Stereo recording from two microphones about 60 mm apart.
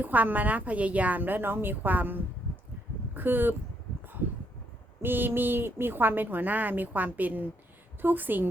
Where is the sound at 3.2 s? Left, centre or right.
Right.